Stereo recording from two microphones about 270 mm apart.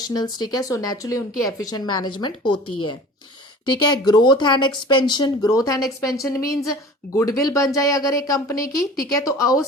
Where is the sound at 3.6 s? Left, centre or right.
Centre.